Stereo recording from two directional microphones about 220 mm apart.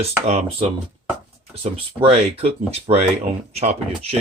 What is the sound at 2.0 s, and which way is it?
A man's voice, 25° right (ahead or behind).